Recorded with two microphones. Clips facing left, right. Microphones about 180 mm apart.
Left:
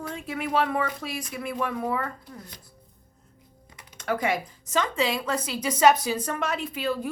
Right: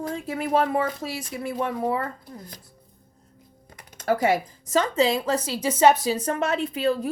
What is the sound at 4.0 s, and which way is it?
Speech, 30° right (ahead or behind).